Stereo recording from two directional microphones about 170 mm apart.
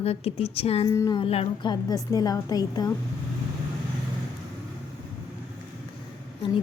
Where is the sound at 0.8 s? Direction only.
20° left (ahead or behind).